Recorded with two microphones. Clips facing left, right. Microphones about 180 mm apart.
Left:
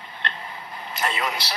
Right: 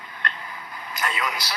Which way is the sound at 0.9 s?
30° left (ahead or behind).